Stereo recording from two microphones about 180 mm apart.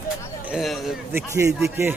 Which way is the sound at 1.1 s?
15° right (ahead or behind).